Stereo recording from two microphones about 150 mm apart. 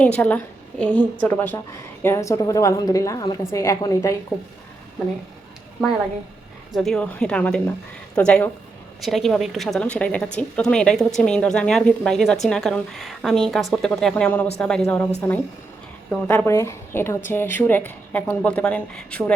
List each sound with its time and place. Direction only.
0.0 s a woman's voice: 10° left (ahead or behind)
4.3 s speech: 5° left (ahead or behind)
6.7 s a woman's voice: centre (ahead or behind)
16.5 s a woman's voice: 20° left (ahead or behind)